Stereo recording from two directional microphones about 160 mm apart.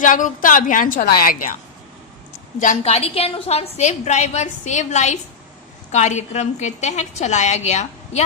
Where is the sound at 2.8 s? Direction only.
40° left (ahead or behind).